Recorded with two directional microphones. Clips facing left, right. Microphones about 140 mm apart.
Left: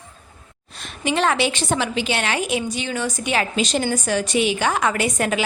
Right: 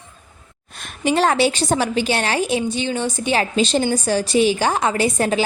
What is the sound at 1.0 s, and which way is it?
A woman's voice, 35° right (ahead or behind).